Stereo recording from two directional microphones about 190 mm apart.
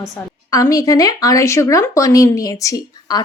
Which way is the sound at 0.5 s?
20° left (ahead or behind).